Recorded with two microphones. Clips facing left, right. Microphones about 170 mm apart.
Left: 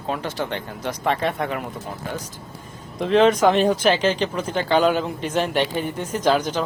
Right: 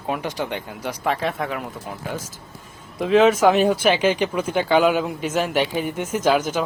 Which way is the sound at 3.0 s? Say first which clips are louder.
Right 1 dB; 5° right (ahead or behind).